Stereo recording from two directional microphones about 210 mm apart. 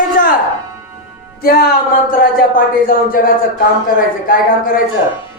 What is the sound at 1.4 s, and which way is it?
Speech, 45° left (ahead or behind).